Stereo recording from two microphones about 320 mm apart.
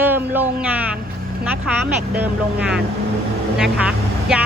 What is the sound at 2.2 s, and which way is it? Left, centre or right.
Speech, centre.